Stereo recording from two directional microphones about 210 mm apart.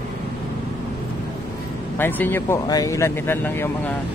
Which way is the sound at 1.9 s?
10° left (ahead or behind).